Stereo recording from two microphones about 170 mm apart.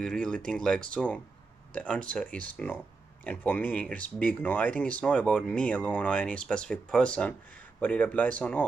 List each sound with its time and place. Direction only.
0.0 s speech: 5° left (ahead or behind)